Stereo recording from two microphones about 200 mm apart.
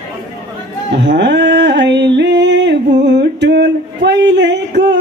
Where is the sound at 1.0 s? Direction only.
60° right (ahead or behind).